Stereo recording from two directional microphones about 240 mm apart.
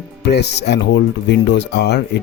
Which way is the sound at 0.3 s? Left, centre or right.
Left.